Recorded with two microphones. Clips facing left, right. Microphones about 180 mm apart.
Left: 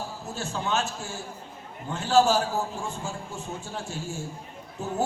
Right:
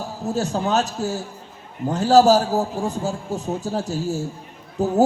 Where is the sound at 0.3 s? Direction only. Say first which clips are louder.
Right 9 dB; 40° right (ahead or behind).